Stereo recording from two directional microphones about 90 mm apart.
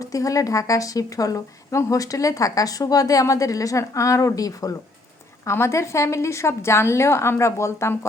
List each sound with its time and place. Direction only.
0.0 s a woman's voice: 40° left (ahead or behind)
5.5 s a woman's voice: 30° left (ahead or behind)